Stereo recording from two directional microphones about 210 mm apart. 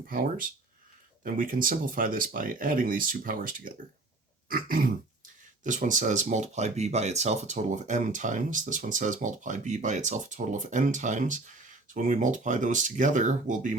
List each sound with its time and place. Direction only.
0.1 s speech: 40° right (ahead or behind)